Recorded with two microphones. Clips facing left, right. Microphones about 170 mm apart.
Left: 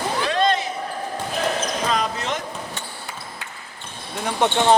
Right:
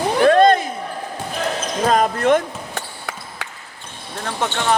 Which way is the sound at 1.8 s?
50° right (ahead or behind).